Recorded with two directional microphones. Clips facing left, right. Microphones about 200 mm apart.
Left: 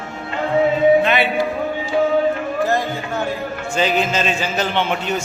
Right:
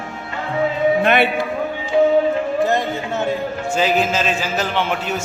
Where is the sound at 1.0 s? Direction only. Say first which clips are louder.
Right 1 dB; 55° right (ahead or behind).